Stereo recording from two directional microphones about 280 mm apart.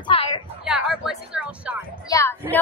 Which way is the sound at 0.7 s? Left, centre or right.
Centre.